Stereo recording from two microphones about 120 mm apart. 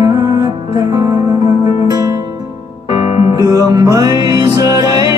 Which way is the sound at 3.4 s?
30° right (ahead or behind).